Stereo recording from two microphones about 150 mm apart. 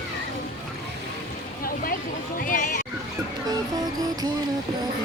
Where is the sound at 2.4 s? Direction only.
65° left (ahead or behind).